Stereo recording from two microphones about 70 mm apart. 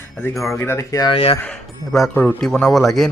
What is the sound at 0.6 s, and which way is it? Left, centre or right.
Speech, left.